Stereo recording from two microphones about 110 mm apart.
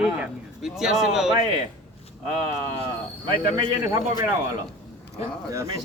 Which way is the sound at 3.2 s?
40° right (ahead or behind).